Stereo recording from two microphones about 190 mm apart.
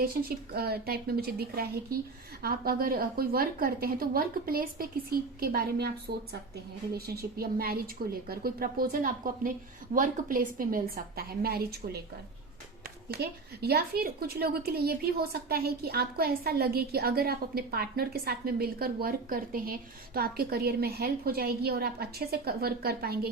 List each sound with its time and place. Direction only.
0.0 s a woman's voice: 50° right (ahead or behind)
6.9 s a woman's voice: 55° right (ahead or behind)
13.1 s a woman's voice: 55° right (ahead or behind)